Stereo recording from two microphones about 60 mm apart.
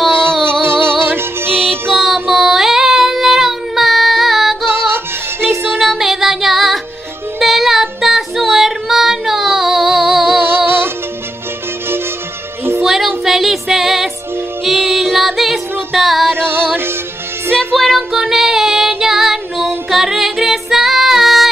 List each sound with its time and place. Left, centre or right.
0.3 s music: centre
0.6 s music: right
1.9 s child singing: centre
4.8 s music: right
5.8 s music: centre
10.4 s music: right
12.8 s music: centre
16.3 s music: right
17.7 s child singing: centre
19.9 s music: centre